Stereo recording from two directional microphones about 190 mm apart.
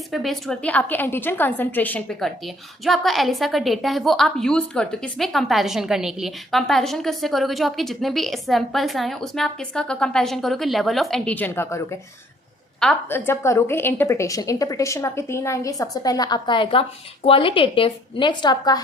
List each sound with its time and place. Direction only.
0.1 s a woman's voice: centre (ahead or behind); by 18.8 s 20° left (ahead or behind)